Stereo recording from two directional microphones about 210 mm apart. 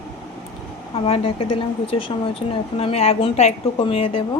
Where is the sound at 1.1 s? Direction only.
25° left (ahead or behind).